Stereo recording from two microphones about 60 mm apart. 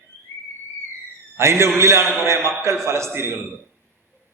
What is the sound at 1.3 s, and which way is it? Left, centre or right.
Speech, right.